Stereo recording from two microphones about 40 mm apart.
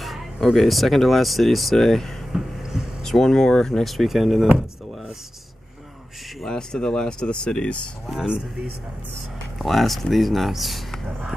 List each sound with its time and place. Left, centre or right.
0.0 s speech: centre
2.3 s a sound: centre
3.0 s speech: centre
3.8 s speech: centre
6.4 s speech: centre
9.6 s speech: centre